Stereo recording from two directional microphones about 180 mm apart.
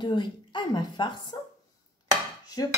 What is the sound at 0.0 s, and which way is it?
Speech, 25° left (ahead or behind).